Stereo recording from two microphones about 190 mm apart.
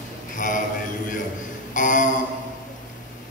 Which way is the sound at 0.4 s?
45° left (ahead or behind).